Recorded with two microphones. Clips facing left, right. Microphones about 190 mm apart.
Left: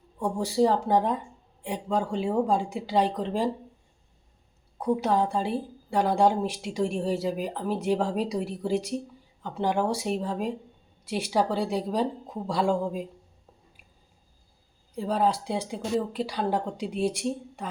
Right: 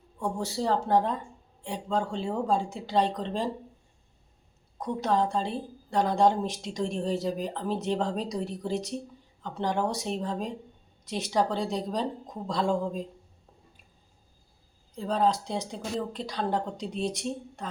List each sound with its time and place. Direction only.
0.2 s a woman's voice: 15° left (ahead or behind)
4.8 s a woman's voice: 10° left (ahead or behind)
14.9 s a woman's voice: 10° left (ahead or behind)